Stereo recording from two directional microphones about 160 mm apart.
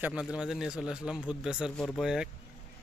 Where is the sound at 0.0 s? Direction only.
5° right (ahead or behind).